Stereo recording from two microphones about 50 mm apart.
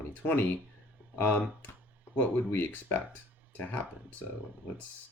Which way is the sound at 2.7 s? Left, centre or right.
Left.